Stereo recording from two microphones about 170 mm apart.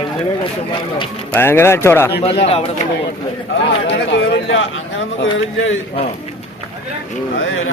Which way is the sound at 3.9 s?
90° left.